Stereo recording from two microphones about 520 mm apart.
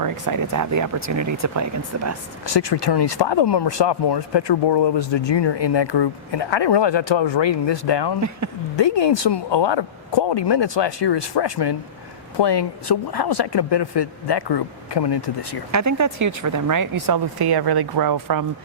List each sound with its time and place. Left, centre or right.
0.0 s speech: right
2.5 s speech: left
15.7 s speech: right